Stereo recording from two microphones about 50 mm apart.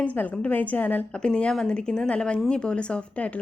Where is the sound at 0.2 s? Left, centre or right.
Left.